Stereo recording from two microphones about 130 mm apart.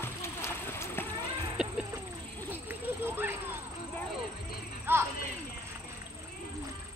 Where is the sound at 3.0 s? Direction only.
15° right (ahead or behind).